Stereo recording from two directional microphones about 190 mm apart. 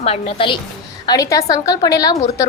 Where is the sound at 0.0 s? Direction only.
30° left (ahead or behind).